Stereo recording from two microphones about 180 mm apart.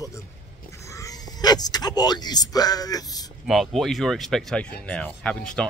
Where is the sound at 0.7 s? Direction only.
15° left (ahead or behind).